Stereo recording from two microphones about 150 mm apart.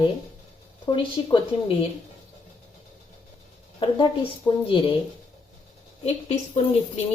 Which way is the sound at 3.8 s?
30° left (ahead or behind).